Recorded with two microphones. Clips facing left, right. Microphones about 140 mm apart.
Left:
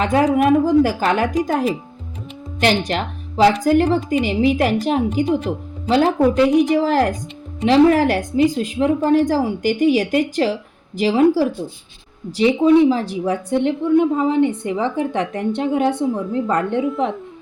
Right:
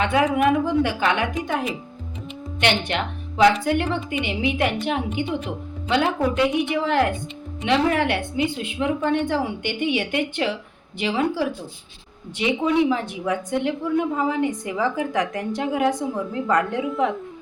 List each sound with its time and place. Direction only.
0.0 s a woman's voice: 40° left (ahead or behind)